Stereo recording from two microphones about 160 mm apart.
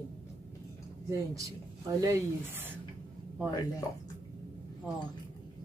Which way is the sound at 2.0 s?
20° right (ahead or behind).